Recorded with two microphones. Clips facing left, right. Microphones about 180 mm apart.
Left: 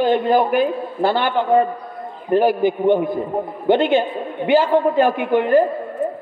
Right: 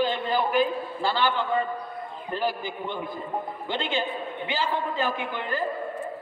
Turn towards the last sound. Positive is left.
turn(degrees=60)  # may be behind; listen again after turning